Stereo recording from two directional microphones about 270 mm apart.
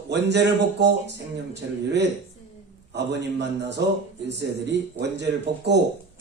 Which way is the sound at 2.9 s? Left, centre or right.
Right.